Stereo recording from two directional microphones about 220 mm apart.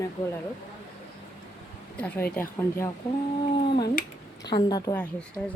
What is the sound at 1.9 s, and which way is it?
Speech, 5° left (ahead or behind).